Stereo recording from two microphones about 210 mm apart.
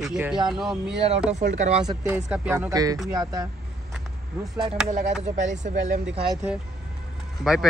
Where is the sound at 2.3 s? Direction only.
10° right (ahead or behind).